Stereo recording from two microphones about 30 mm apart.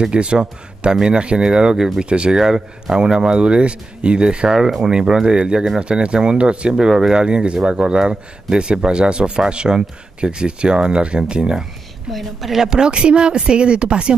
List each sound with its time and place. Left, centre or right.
0.0 s speech: right
2.3 s speech: centre
3.3 s speech: right
6.8 s speech: centre
7.2 s speech: right
12.1 s a woman's voice: centre
12.6 s speech: right